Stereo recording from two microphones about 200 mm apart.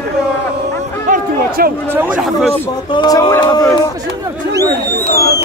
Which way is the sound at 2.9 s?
20° left (ahead or behind).